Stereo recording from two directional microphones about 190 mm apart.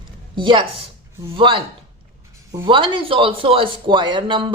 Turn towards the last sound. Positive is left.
turn(degrees=-25)  # may be behind; listen again after turning